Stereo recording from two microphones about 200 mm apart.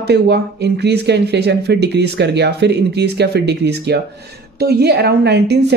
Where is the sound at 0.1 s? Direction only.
55° right (ahead or behind).